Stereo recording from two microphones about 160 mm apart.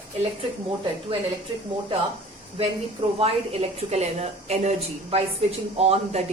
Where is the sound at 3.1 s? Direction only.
40° right (ahead or behind).